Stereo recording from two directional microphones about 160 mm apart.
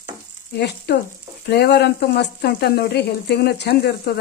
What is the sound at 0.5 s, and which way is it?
Frying, 90° left.